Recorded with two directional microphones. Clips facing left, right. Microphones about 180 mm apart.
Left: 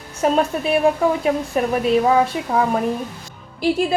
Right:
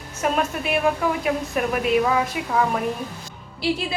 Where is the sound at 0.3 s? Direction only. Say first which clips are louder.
Left 5 dB; 30° left (ahead or behind).